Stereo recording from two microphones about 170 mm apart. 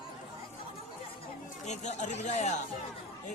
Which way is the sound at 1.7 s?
45° left (ahead or behind).